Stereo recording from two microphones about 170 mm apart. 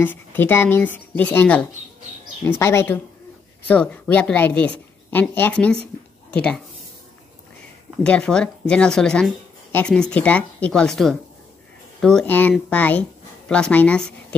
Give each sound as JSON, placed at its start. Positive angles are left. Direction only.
{"t": 0.0, "sound": "a woman's voice", "side_deg": 10}
{"t": 8.0, "sound": "a woman's voice", "side_deg": 5}